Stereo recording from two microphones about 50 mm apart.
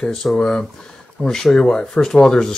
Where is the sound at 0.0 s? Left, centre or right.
Centre.